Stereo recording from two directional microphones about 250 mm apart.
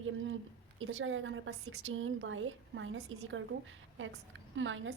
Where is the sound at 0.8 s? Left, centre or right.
Right.